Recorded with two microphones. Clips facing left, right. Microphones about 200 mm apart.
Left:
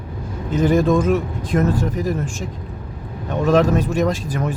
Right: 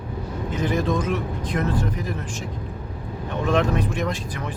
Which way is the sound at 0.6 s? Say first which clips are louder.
Left 8 dB; 45° left (ahead or behind).